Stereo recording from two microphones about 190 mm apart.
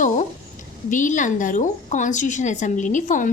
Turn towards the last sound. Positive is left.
turn(degrees=45)  # may be behind; listen again after turning